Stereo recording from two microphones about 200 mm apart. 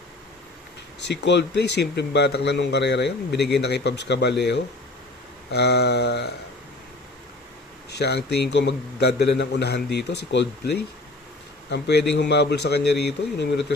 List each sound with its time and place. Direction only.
1.0 s a man's voice: 60° left (ahead or behind)
7.9 s a man's voice: 55° left (ahead or behind)
11.7 s a man's voice: 55° left (ahead or behind)